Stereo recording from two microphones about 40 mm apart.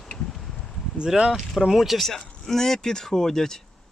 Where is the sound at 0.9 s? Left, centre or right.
Centre.